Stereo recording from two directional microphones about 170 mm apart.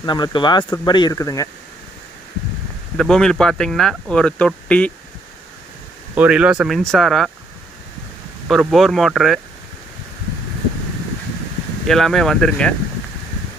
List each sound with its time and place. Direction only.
0.0 s speech: 25° left (ahead or behind)
3.0 s speech: 5° left (ahead or behind)
6.1 s speech: 5° right (ahead or behind)
8.5 s speech: centre (ahead or behind)
11.9 s speech: centre (ahead or behind)